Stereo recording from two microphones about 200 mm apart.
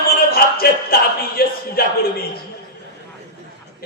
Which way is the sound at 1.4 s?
50° left (ahead or behind).